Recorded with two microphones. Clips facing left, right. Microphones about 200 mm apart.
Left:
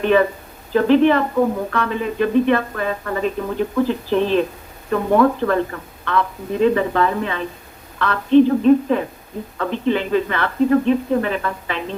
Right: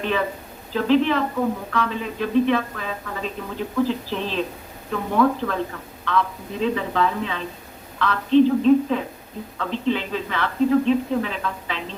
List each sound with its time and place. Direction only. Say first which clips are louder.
0.0 s a woman's voice: left 8 dB; 55° left (ahead or behind)